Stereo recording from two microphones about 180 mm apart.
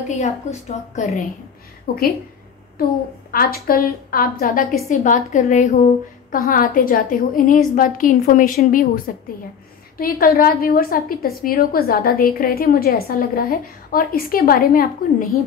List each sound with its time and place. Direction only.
0.2 s a woman's voice: 40° left (ahead or behind)
1.9 s a woman's voice: 55° left (ahead or behind)